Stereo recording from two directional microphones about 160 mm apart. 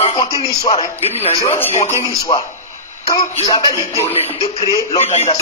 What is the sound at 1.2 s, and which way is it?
Speech, 40° left (ahead or behind).